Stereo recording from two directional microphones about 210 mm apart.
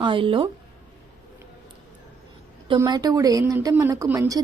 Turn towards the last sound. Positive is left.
turn(degrees=-15)  # may be behind; listen again after turning